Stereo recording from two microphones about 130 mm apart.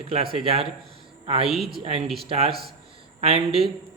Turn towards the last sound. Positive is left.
turn(degrees=-50)  # may be behind; listen again after turning